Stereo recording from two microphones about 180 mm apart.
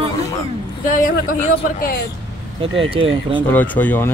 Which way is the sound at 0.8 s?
45° left (ahead or behind).